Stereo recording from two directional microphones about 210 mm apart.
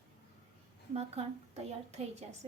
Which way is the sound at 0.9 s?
30° right (ahead or behind).